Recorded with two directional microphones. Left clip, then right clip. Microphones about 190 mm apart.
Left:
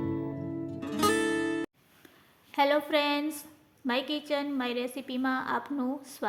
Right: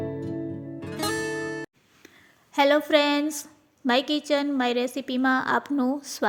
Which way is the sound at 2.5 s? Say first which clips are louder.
Right 6 dB; 35° right (ahead or behind).